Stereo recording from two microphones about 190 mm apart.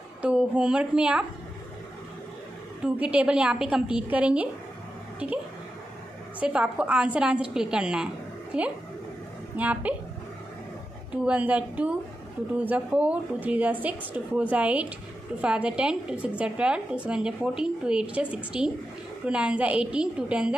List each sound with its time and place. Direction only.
0.2 s a woman's voice: 5° right (ahead or behind)
2.8 s a woman's voice: 5° right (ahead or behind)
6.4 s a woman's voice: 5° right (ahead or behind)
11.2 s a woman's voice: 5° right (ahead or behind)